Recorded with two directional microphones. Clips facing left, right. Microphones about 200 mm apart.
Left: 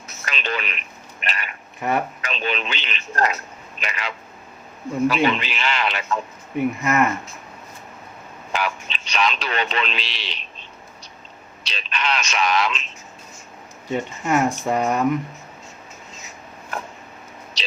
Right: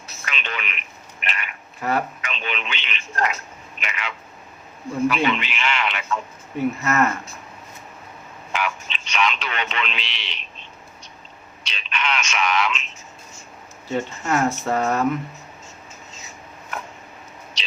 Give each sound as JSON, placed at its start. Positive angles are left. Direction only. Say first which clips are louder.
{"t": 0.3, "sound": "speech", "louder": "left 4 dB", "side_deg": 35}
{"t": 1.8, "sound": "speech", "louder": "left 1 dB", "side_deg": 20}
{"t": 2.2, "sound": "speech", "louder": "left 4 dB", "side_deg": 35}
{"t": 6.8, "sound": "speech", "louder": "left 1 dB", "side_deg": 15}
{"t": 8.5, "sound": "speech", "louder": "left 1 dB", "side_deg": 35}
{"t": 11.6, "sound": "speech", "louder": "left 1 dB", "side_deg": 35}
{"t": 13.8, "sound": "speech", "louder": "left 1 dB", "side_deg": 15}